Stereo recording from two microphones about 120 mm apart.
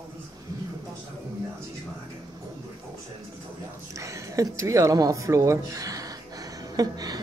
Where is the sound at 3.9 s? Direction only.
25° right (ahead or behind).